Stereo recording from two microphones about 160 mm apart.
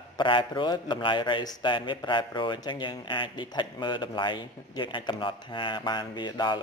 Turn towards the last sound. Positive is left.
turn(degrees=30)  # may be behind; listen again after turning